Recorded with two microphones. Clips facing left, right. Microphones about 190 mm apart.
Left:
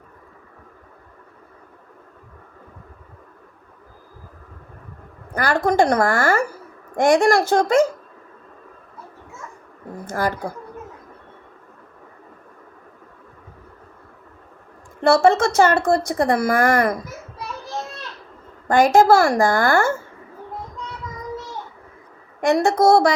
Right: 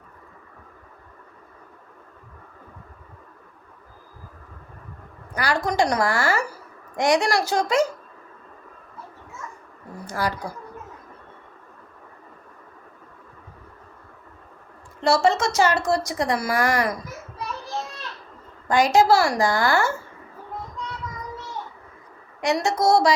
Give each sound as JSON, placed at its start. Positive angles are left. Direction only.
{"t": 5.3, "sound": "a woman's voice", "side_deg": 55}
{"t": 10.0, "sound": "a woman's voice", "side_deg": 50}
{"t": 15.0, "sound": "a woman's voice", "side_deg": 55}
{"t": 18.7, "sound": "a woman's voice", "side_deg": 50}
{"t": 22.4, "sound": "a woman's voice", "side_deg": 55}